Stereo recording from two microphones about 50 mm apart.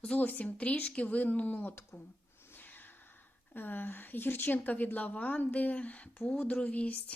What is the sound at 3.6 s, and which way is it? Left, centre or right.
A woman's voice, left.